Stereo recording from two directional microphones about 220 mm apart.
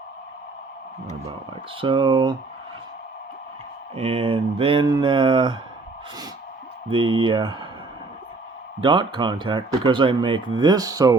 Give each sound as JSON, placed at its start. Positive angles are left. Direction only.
{"t": 1.8, "sound": "speech", "side_deg": -25}
{"t": 3.9, "sound": "speech", "side_deg": -25}
{"t": 6.9, "sound": "speech", "side_deg": -25}
{"t": 8.8, "sound": "speech", "side_deg": -20}